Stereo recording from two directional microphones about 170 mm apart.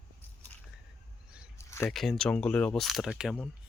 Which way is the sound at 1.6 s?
15° left (ahead or behind).